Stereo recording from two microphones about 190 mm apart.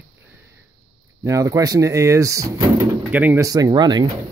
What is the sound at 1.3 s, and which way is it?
Speech, 15° right (ahead or behind).